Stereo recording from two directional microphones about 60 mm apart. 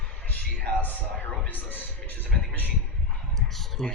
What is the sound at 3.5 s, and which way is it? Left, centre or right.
Clicking, centre.